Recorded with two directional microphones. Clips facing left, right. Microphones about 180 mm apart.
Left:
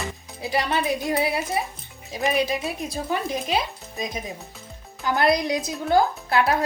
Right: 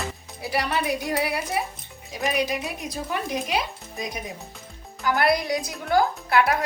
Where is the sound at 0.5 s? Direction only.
25° left (ahead or behind).